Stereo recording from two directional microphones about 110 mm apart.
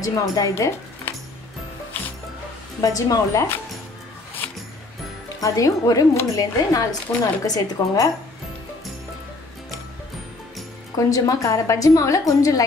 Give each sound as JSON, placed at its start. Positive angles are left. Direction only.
{"t": 0.0, "sound": "speech", "side_deg": 30}
{"t": 2.0, "sound": "music", "side_deg": 15}
{"t": 2.8, "sound": "a woman's voice", "side_deg": 35}
{"t": 5.4, "sound": "a woman's voice", "side_deg": 30}
{"t": 11.0, "sound": "a woman's voice", "side_deg": 30}